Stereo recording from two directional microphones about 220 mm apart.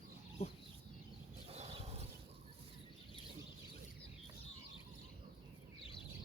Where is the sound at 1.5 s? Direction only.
30° right (ahead or behind).